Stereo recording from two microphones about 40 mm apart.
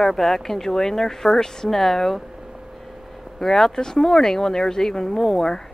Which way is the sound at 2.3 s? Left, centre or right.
Centre.